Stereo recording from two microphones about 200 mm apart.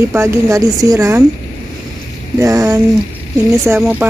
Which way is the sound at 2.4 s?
15° right (ahead or behind).